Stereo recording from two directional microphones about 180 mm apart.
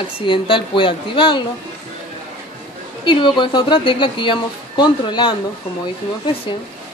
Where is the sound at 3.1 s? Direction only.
25° left (ahead or behind).